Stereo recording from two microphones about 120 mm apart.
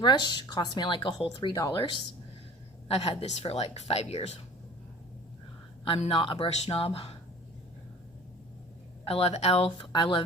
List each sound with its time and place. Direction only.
0.0 s speech: 40° left (ahead or behind)
2.9 s a woman's voice: 55° left (ahead or behind)
5.9 s speech: 50° left (ahead or behind)
6.5 s a woman's voice: 55° left (ahead or behind)
9.0 s a woman's voice: 55° left (ahead or behind)
9.6 s speech: 45° left (ahead or behind)